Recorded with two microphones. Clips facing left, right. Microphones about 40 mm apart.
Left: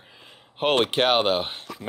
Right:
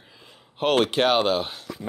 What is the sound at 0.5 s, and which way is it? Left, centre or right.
Speech, left.